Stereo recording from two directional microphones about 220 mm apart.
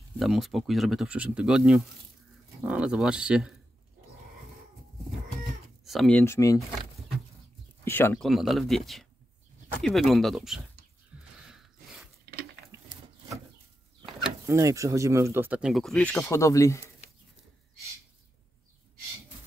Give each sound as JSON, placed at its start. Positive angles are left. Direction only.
{"t": 0.2, "sound": "speech", "side_deg": 0}
{"t": 5.9, "sound": "speech", "side_deg": 0}
{"t": 7.8, "sound": "speech", "side_deg": 10}
{"t": 8.3, "sound": "speech", "side_deg": 0}
{"t": 11.4, "sound": "a sound", "side_deg": -5}
{"t": 12.7, "sound": "wood", "side_deg": -15}
{"t": 14.4, "sound": "speech", "side_deg": -15}